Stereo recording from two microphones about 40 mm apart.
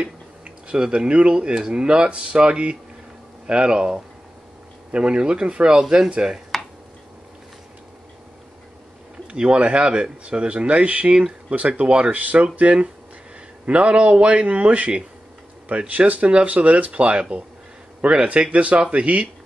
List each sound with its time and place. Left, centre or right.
0.7 s speech: right
9.3 s speech: right
11.1 s speech: right
11.5 s speech: right
13.7 s speech: right